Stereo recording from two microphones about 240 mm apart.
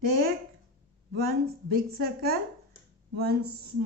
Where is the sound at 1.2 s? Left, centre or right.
Right.